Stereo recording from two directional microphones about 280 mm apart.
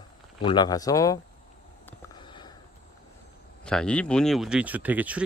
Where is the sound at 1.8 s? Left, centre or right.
Centre.